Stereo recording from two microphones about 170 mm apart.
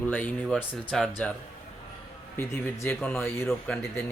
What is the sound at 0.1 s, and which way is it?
Speech, 5° left (ahead or behind).